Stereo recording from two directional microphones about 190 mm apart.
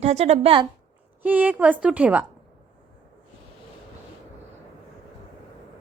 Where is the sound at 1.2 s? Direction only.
10° right (ahead or behind).